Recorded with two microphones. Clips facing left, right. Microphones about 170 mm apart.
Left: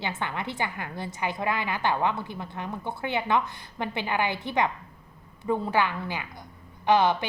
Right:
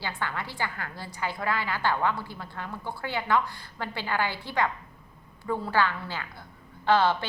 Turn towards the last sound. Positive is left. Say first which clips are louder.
# left 1 dB
turn(degrees=15)  # may be behind; listen again after turning